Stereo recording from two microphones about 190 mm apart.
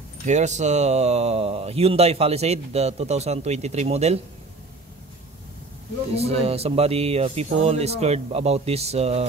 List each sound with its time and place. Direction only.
0.2 s speech: 40° right (ahead or behind)
6.1 s speech: 30° right (ahead or behind)